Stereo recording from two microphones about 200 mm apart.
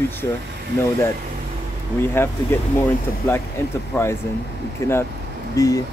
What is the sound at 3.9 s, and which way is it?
Speech, 15° left (ahead or behind).